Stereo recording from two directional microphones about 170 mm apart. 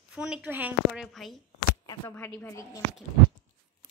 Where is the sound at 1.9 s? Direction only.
15° left (ahead or behind).